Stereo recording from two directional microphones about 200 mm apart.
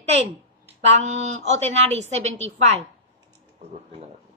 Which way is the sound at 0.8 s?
35° right (ahead or behind).